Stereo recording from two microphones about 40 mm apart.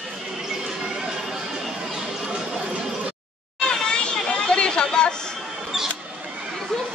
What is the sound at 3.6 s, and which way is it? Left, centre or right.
Chatter, centre.